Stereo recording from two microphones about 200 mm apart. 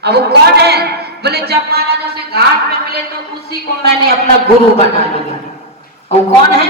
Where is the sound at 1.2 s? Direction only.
55° right (ahead or behind).